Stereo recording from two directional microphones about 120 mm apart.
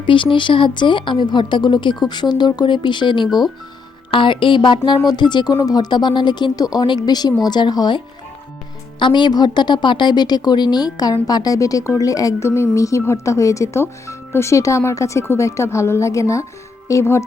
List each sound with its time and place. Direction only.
0.0 s speech: 45° left (ahead or behind)
3.2 s speech: centre (ahead or behind)
4.1 s a woman's voice: 45° left (ahead or behind); by 17.2 s 25° left (ahead or behind)